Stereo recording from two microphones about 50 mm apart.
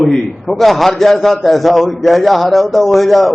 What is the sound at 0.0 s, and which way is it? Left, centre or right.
A man's voice, centre.